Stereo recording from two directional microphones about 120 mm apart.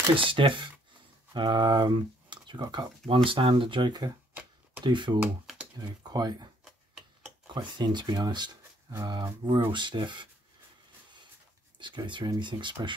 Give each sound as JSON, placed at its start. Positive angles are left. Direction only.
{"t": 0.1, "sound": "speech", "side_deg": -45}
{"t": 3.3, "sound": "speech", "side_deg": -45}
{"t": 4.3, "sound": "a sound", "side_deg": -15}
{"t": 4.8, "sound": "speech", "side_deg": -40}
{"t": 5.2, "sound": "computer keyboard", "side_deg": -10}
{"t": 5.8, "sound": "speech", "side_deg": -30}
{"t": 11.8, "sound": "speech", "side_deg": -40}